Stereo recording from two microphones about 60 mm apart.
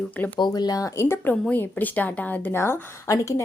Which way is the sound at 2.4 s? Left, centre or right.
Left.